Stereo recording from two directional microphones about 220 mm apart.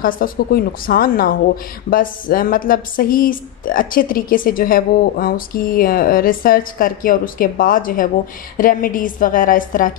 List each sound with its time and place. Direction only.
0.0 s a woman's voice: 40° left (ahead or behind)